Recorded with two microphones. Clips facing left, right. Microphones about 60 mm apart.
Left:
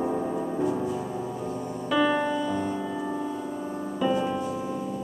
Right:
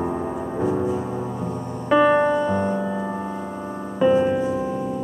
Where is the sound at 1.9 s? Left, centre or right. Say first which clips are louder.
Right 8 dB; right.